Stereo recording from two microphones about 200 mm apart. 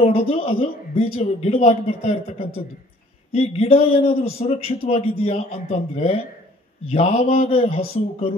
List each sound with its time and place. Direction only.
0.0 s a man's voice: 30° left (ahead or behind)